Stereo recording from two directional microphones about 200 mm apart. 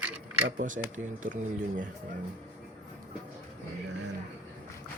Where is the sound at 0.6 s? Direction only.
40° right (ahead or behind).